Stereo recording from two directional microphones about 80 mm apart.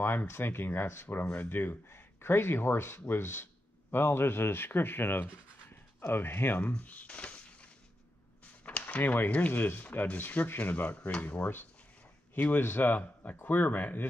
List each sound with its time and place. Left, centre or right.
0.0 s speech: left
6.7 s a sound: centre
8.6 s speech: centre